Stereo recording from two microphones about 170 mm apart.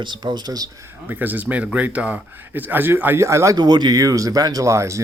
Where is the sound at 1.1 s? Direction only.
10° right (ahead or behind).